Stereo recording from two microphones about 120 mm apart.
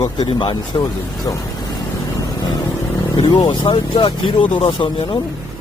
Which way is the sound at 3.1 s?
35° left (ahead or behind).